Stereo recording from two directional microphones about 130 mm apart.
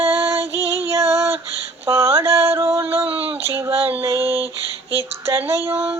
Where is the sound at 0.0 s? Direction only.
20° right (ahead or behind).